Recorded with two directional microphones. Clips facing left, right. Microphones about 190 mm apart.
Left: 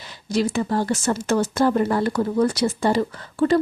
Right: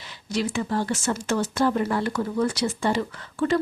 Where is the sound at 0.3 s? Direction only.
40° left (ahead or behind).